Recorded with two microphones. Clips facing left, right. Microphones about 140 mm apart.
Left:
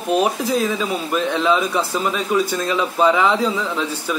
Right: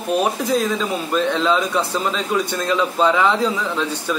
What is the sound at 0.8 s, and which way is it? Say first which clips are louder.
A man's voice: right 1 dB; 10° left (ahead or behind).